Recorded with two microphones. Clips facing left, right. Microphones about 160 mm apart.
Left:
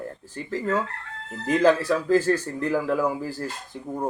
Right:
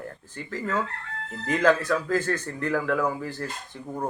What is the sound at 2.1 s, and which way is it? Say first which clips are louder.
Speech: left 8 dB; 30° left (ahead or behind).